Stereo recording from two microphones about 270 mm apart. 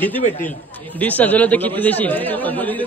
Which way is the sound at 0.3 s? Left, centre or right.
Centre.